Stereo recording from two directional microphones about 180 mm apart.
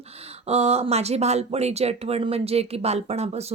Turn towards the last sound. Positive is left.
turn(degrees=-35)  # may be behind; listen again after turning